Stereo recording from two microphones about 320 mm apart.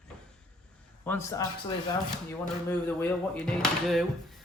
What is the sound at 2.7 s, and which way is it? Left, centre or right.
Speech, centre.